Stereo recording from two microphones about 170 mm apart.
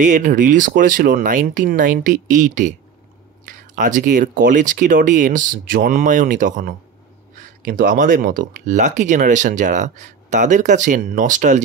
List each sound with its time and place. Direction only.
0.0 s speech: 50° right (ahead or behind)